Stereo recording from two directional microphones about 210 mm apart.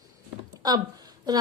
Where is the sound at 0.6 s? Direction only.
20° right (ahead or behind).